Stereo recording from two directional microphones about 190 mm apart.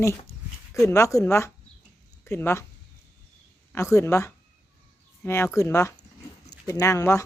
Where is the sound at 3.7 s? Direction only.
15° left (ahead or behind).